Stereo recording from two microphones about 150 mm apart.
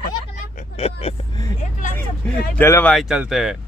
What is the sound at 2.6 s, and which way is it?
Speech, 15° left (ahead or behind).